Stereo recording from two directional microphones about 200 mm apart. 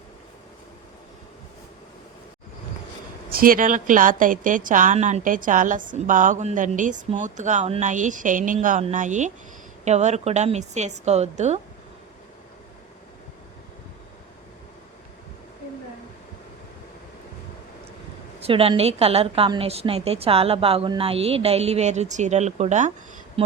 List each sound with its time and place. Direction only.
3.3 s a woman's voice: 45° right (ahead or behind)
18.3 s a woman's voice: 30° right (ahead or behind)